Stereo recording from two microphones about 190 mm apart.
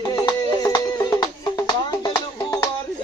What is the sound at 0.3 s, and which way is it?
Music, 20° left (ahead or behind).